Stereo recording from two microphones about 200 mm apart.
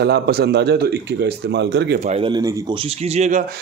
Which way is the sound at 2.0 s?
30° right (ahead or behind).